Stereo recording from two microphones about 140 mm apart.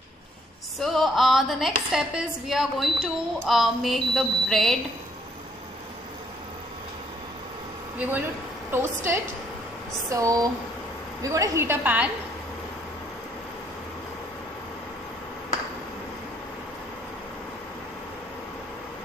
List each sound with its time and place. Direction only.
0.7 s a woman's voice: centre (ahead or behind)
8.7 s a woman's voice: 15° right (ahead or behind)